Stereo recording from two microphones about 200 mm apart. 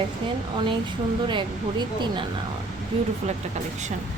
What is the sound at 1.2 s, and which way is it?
A woman's voice, 25° right (ahead or behind).